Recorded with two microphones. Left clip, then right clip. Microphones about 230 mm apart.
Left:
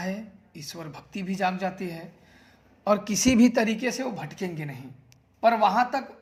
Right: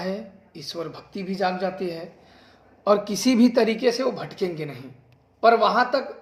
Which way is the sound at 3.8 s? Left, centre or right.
Left.